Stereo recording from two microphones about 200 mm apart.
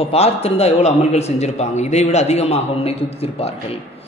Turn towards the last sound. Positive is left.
turn(degrees=30)  # may be behind; listen again after turning